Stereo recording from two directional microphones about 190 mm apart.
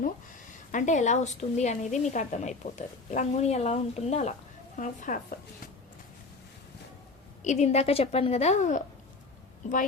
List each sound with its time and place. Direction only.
0.7 s a woman's voice: 40° left (ahead or behind)
7.4 s a woman's voice: 40° left (ahead or behind)